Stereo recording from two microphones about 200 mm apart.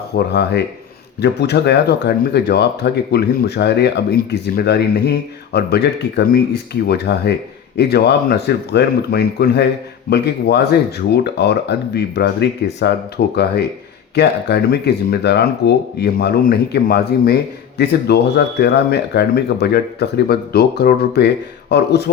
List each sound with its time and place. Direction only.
0.1 s speech: 55° left (ahead or behind)